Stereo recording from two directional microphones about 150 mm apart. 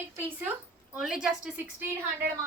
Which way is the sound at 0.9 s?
5° right (ahead or behind).